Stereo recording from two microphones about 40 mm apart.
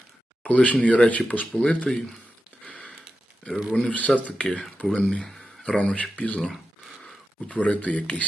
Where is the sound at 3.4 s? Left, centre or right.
Left.